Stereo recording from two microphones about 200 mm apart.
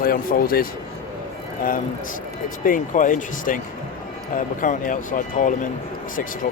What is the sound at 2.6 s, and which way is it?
Speech, 40° left (ahead or behind).